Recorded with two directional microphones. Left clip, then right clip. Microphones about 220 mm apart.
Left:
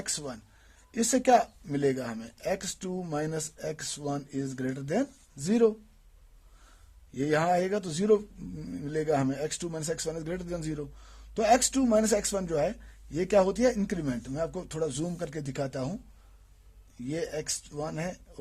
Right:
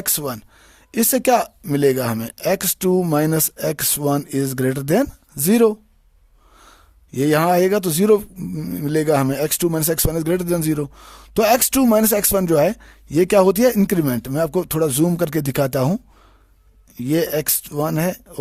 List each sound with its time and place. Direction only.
0.0 s speech: 50° right (ahead or behind)
7.1 s speech: 45° right (ahead or behind)
17.1 s speech: 50° right (ahead or behind)